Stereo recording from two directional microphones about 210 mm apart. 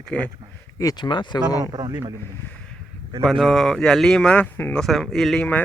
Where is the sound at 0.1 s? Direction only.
5° left (ahead or behind).